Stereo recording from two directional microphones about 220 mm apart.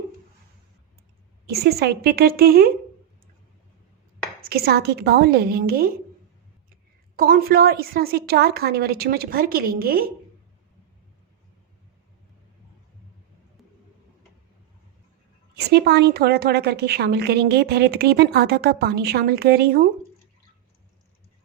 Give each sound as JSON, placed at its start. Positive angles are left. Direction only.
{"t": 1.5, "sound": "a woman's voice", "side_deg": -45}
{"t": 4.4, "sound": "a woman's voice", "side_deg": -45}
{"t": 7.2, "sound": "a woman's voice", "side_deg": -40}
{"t": 15.5, "sound": "a woman's voice", "side_deg": -50}